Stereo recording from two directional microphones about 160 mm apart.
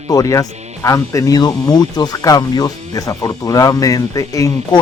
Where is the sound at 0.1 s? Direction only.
20° left (ahead or behind).